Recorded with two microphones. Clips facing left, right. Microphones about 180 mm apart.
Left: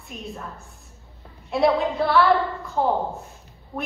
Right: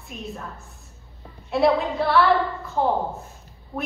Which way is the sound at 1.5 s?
Centre (ahead or behind).